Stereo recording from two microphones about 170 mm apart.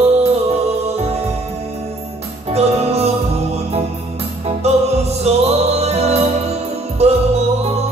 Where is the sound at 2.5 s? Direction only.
40° right (ahead or behind).